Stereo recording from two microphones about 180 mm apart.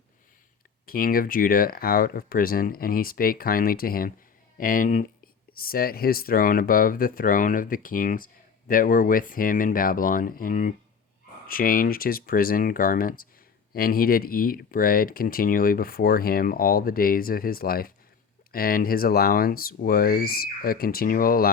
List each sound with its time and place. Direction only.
0.9 s speech: 55° left (ahead or behind)